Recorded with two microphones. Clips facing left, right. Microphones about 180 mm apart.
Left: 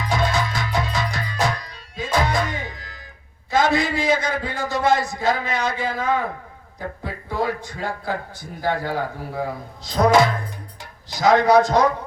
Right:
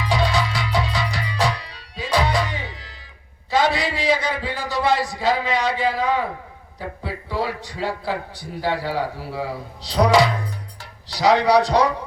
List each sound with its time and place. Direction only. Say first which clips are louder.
0.0 s music: right 1 dB; 45° left (ahead or behind)
3.5 s a man's voice: left 1 dB; 45° left (ahead or behind)
7.3 s a man's voice: left 2 dB; 45° left (ahead or behind)